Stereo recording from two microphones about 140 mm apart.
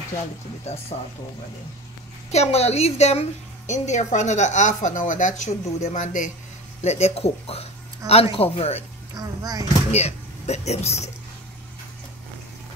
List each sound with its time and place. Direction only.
2.3 s a woman's voice: 50° left (ahead or behind)
9.1 s speech: 25° right (ahead or behind)
9.8 s speech: 50° left (ahead or behind)